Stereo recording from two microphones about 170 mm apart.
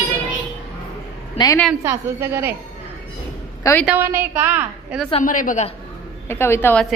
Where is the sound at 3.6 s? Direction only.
15° left (ahead or behind).